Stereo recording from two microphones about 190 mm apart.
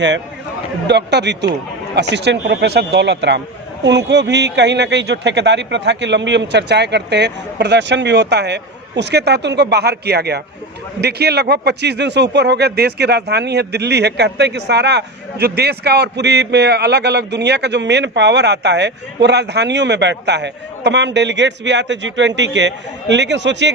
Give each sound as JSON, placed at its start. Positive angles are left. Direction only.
{"t": 0.9, "sound": "a man's voice", "side_deg": -65}